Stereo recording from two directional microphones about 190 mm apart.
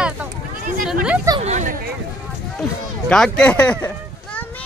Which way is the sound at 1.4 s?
35° right (ahead or behind).